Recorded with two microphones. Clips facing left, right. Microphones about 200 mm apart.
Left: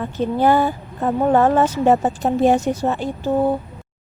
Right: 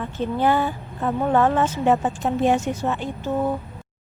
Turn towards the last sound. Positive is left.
turn(degrees=30)  # may be behind; listen again after turning